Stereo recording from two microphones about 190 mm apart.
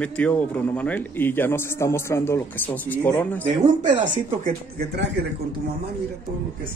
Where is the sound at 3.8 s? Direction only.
40° right (ahead or behind).